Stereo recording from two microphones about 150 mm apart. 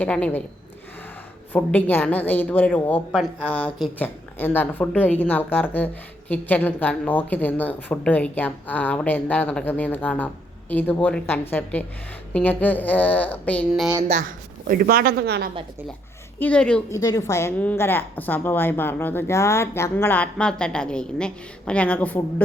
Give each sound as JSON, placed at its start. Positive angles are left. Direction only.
{"t": 0.0, "sound": "a woman's voice", "side_deg": 10}
{"t": 1.5, "sound": "a woman's voice", "side_deg": 10}
{"t": 14.7, "sound": "speech", "side_deg": -80}
{"t": 16.4, "sound": "a woman's voice", "side_deg": 5}
{"t": 16.9, "sound": "a woman's voice", "side_deg": 25}